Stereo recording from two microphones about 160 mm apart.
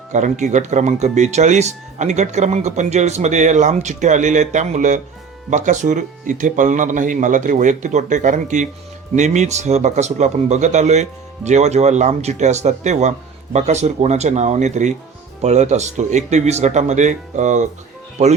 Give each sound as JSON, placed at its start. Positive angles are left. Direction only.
{"t": 0.1, "sound": "speech", "side_deg": -50}